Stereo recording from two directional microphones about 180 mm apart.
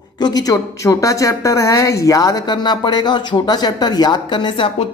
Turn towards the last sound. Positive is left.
turn(degrees=30)  # may be behind; listen again after turning